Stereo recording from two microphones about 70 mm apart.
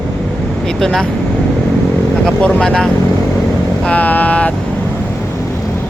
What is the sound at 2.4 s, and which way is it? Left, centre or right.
Speech, centre.